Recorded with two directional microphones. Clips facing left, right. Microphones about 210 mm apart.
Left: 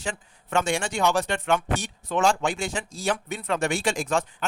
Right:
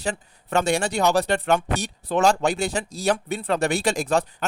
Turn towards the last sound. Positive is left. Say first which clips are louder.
# right 3 dB
turn(degrees=-40)  # may be behind; listen again after turning